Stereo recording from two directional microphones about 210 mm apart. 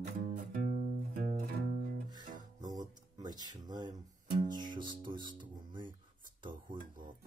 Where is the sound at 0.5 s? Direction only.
40° right (ahead or behind).